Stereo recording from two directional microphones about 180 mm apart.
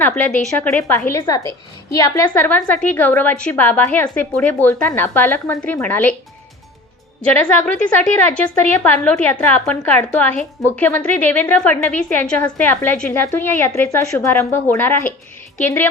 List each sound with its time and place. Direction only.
0.0 s a woman's voice: 10° left (ahead or behind)
7.6 s a woman's voice: 5° left (ahead or behind)